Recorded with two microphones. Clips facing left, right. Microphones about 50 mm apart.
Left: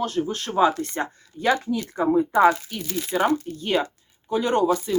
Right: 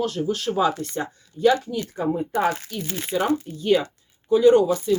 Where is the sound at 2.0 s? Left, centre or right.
Left.